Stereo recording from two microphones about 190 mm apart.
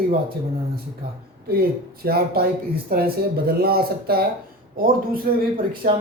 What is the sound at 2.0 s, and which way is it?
Speech, 55° right (ahead or behind).